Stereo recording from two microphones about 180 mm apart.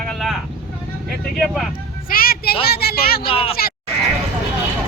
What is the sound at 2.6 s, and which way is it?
Speech, 60° left (ahead or behind).